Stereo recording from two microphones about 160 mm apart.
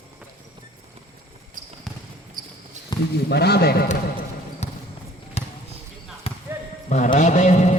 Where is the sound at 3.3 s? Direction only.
90° left.